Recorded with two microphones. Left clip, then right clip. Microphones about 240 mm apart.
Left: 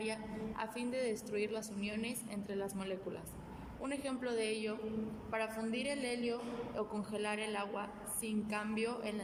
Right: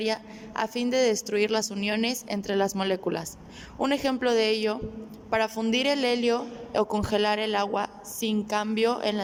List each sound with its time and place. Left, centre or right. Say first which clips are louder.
0.0 s a woman's voice: right 12 dB; right